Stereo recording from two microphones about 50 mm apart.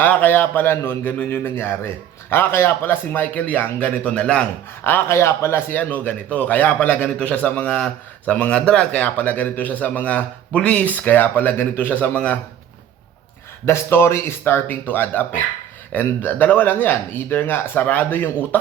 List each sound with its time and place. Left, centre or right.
0.0 s a man's voice: left; by 4.4 s centre
4.8 s speech: left
5.7 s a man's voice: left
10.8 s a man's voice: left
13.7 s a man's voice: left
14.7 s speech: left